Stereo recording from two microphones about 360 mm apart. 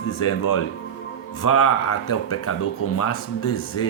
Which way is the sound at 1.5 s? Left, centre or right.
Left.